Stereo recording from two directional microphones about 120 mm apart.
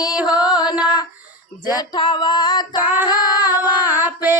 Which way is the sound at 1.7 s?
40° left (ahead or behind).